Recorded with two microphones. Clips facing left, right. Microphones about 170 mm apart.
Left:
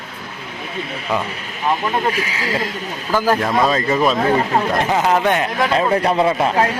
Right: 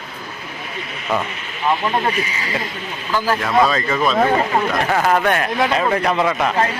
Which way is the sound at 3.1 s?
45° left (ahead or behind).